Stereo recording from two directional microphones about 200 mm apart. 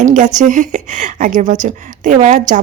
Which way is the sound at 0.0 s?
40° right (ahead or behind).